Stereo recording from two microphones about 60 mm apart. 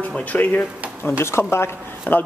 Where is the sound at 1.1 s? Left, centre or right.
Left.